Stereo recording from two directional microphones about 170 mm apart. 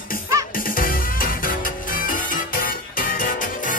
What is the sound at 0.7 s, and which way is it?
Music, 55° left (ahead or behind).